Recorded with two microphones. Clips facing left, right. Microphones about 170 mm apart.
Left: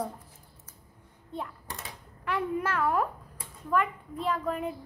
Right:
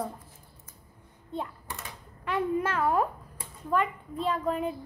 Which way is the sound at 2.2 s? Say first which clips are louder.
Right 2 dB; 25° right (ahead or behind).